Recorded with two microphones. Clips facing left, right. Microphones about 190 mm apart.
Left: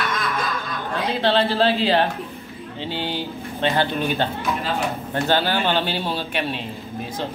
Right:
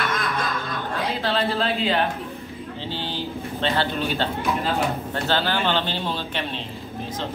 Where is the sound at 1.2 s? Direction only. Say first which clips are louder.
Left 6 dB; 30° left (ahead or behind).